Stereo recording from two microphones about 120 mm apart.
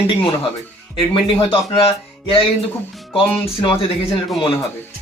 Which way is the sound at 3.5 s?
50° left (ahead or behind).